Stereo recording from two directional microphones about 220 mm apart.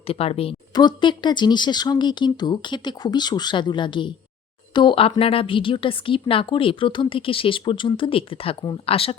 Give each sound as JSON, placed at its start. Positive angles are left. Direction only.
{"t": 0.1, "sound": "a woman's voice", "side_deg": 25}